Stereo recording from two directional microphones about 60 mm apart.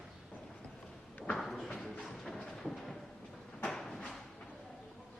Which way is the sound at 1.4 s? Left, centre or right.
Centre.